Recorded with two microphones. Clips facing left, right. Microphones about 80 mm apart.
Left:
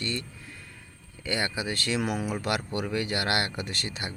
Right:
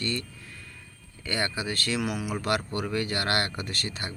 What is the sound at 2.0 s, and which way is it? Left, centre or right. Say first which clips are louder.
Speech: left 1 dB; left.